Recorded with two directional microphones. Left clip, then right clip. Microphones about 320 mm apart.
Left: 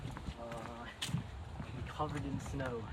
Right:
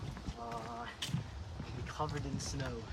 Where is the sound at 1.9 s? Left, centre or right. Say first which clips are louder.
Even; centre.